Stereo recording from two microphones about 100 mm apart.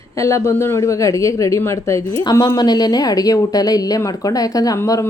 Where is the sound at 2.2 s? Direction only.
40° left (ahead or behind).